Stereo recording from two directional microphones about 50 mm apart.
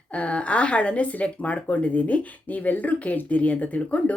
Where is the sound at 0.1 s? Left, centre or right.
Left.